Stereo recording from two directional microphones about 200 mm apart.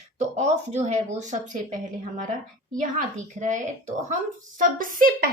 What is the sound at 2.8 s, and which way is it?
A woman's voice, 40° right (ahead or behind).